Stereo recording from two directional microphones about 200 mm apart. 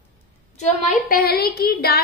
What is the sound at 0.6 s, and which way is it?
A woman's voice, 40° left (ahead or behind).